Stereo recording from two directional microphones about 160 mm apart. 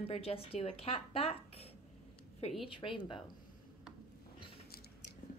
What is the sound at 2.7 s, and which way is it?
Speech, 30° left (ahead or behind).